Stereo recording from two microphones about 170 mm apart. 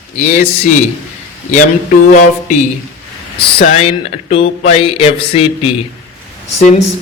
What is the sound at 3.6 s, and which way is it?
Speech, 40° left (ahead or behind).